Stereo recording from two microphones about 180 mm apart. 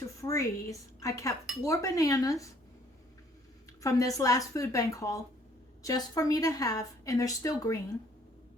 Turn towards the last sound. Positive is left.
turn(degrees=20)  # may be behind; listen again after turning